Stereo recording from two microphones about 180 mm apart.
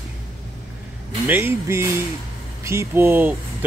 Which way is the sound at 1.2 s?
10° right (ahead or behind).